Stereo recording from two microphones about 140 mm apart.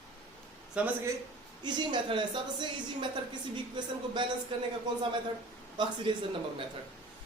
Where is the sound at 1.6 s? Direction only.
30° right (ahead or behind).